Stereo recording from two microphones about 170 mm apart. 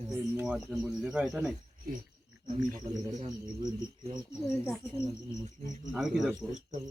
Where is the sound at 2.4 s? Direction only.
45° right (ahead or behind).